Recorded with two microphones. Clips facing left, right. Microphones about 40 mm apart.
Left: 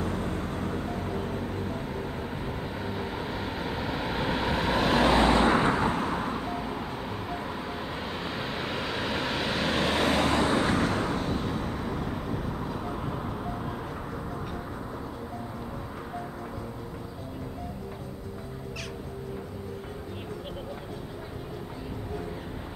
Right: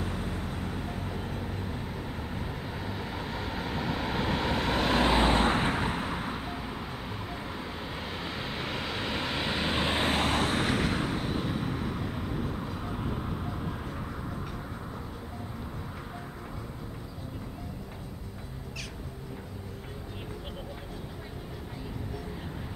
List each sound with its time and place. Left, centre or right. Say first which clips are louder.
0.0 s vehicle: left 4 dB; left
1.3 s vehicle: left 4 dB; centre
5.3 s vehicle: left 3 dB; right
6.1 s vehicle: left 4 dB; centre
10.2 s vehicle: left 3 dB; right
11.0 s vehicle: left 2 dB; centre